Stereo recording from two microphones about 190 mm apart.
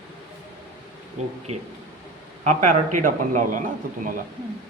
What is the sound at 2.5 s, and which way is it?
A man's voice, 40° right (ahead or behind).